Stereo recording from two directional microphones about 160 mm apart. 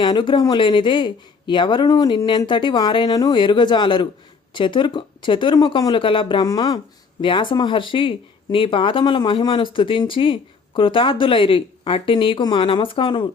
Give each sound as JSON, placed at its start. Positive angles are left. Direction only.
{"t": 0.0, "sound": "speech", "side_deg": 30}